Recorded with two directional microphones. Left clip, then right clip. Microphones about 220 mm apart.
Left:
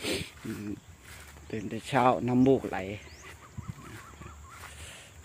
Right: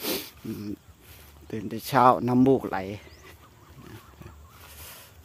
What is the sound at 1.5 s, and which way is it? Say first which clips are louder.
Speech: right 4 dB; 25° right (ahead or behind).